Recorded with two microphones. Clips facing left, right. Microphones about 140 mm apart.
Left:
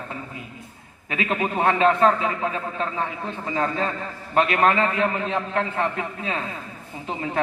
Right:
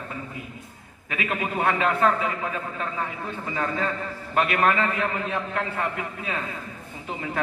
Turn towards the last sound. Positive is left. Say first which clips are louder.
# left 4 dB
turn(degrees=30)  # may be behind; listen again after turning